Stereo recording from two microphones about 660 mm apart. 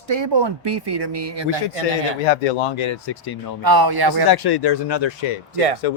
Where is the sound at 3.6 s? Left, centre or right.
Right.